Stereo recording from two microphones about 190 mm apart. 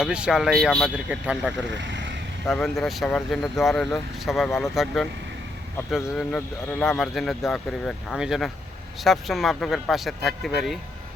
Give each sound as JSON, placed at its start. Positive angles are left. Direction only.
{"t": 0.0, "sound": "speech", "side_deg": -5}
{"t": 1.7, "sound": "vehicle", "side_deg": -70}
{"t": 2.5, "sound": "speech", "side_deg": 0}